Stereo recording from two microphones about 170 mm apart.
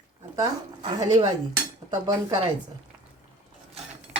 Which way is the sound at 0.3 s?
25° right (ahead or behind).